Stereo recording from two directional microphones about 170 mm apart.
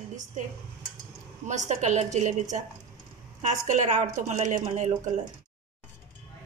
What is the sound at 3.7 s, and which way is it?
A woman's voice, 45° right (ahead or behind).